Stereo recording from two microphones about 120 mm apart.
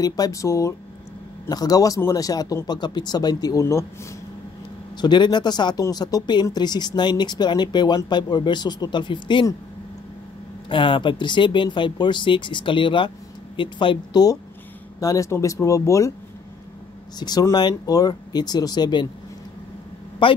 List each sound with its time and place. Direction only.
0.0 s speech: 30° left (ahead or behind)
5.0 s speech: 40° left (ahead or behind)
10.7 s speech: 45° left (ahead or behind); by 16.1 s 25° left (ahead or behind)
17.2 s speech: 35° left (ahead or behind)
20.2 s speech: 45° left (ahead or behind)